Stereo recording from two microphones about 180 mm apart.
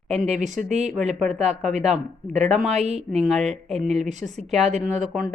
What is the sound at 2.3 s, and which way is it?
Speech, 40° right (ahead or behind).